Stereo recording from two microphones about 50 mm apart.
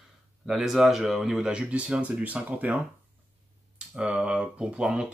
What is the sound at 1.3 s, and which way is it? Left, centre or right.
Speech, centre.